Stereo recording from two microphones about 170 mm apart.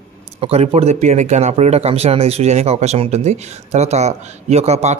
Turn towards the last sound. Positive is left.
turn(degrees=-40)  # may be behind; listen again after turning